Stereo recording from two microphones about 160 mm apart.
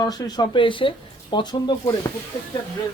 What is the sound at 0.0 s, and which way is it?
Speech, 25° left (ahead or behind).